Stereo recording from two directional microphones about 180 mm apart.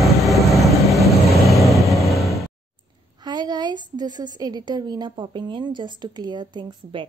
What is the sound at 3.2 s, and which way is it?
A woman's voice, 20° right (ahead or behind).